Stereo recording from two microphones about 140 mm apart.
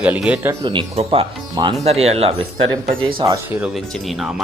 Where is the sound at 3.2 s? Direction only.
35° right (ahead or behind).